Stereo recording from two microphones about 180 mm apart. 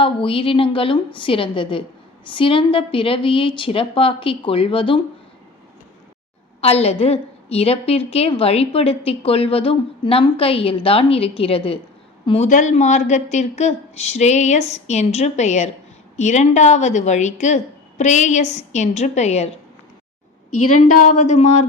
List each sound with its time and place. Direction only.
0.0 s a woman's voice: 30° left (ahead or behind)
6.6 s a woman's voice: 35° left (ahead or behind)
12.5 s a woman's voice: 45° left (ahead or behind)
21.2 s a woman's voice: 40° left (ahead or behind)